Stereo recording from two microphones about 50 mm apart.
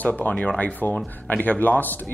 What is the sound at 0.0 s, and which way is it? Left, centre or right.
Speech, left.